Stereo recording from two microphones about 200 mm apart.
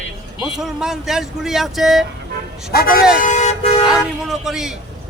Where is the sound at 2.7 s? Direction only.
45° left (ahead or behind).